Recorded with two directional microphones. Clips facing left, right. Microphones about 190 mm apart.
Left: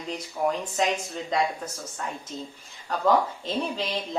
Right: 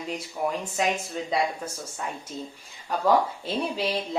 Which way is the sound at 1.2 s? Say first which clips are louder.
Right 2 dB; 5° right (ahead or behind).